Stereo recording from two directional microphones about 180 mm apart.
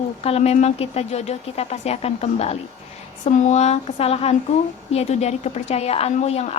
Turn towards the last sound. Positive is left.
turn(degrees=35)  # may be behind; listen again after turning